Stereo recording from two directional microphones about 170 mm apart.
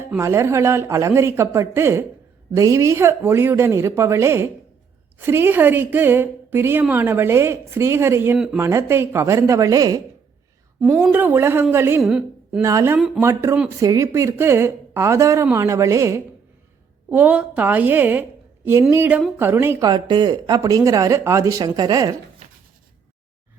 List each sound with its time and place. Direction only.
0.2 s a woman's voice: 15° right (ahead or behind)
12.0 s a woman's voice: 5° right (ahead or behind)
12.6 s a woman's voice: 15° right (ahead or behind)